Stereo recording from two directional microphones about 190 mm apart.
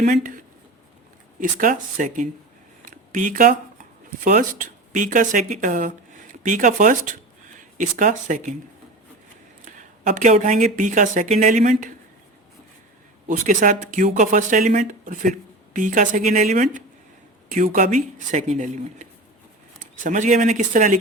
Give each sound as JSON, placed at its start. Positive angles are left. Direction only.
{"t": 0.1, "sound": "speech", "side_deg": -45}
{"t": 9.6, "sound": "speech", "side_deg": -40}
{"t": 13.2, "sound": "speech", "side_deg": -45}